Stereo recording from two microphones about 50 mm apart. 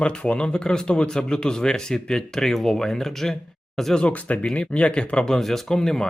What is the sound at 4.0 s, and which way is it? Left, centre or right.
Speech, left.